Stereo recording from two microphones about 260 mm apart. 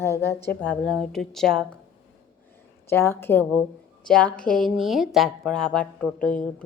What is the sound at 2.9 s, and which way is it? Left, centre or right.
A woman's voice, centre.